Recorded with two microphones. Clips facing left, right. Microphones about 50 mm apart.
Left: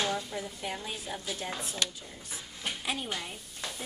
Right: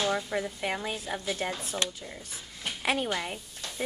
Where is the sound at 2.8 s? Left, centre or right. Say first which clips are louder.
Right 9 dB; right.